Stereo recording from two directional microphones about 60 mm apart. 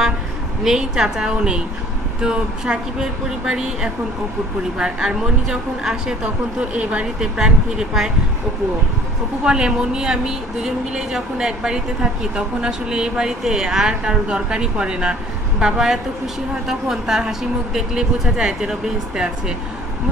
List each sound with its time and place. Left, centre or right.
0.7 s a woman's voice: centre
7.3 s a woman's voice: centre
9.4 s a woman's voice: centre